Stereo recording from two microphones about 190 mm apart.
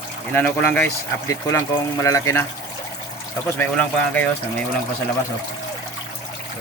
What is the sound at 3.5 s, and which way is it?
Speech, 10° left (ahead or behind).